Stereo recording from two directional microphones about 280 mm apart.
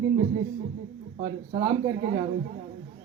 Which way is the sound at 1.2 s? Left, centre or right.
Right.